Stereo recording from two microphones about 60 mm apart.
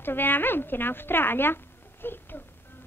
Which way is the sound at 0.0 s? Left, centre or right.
Left.